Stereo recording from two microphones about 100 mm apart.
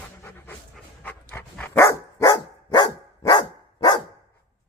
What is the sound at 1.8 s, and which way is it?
Dog, 30° left (ahead or behind).